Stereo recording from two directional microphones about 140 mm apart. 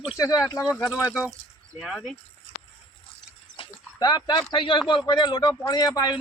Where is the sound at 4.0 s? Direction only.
30° left (ahead or behind).